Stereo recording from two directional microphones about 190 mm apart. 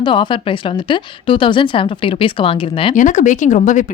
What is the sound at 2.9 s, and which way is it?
Speech, 40° left (ahead or behind).